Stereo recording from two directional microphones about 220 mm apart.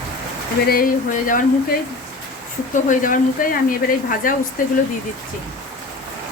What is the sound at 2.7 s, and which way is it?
Speech, 35° left (ahead or behind).